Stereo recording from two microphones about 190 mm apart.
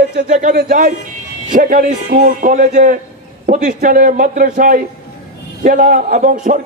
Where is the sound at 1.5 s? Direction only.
45° right (ahead or behind).